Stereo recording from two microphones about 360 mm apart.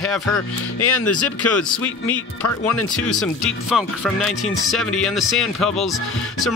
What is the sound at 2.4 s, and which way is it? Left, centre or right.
Speech, left.